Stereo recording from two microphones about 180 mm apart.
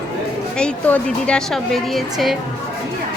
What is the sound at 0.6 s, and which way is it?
A woman's voice, 5° left (ahead or behind).